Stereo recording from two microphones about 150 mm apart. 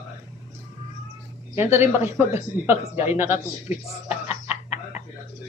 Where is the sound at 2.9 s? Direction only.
45° left (ahead or behind).